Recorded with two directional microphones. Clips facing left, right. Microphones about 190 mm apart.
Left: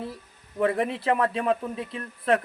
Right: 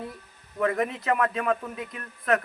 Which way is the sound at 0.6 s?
30° left (ahead or behind).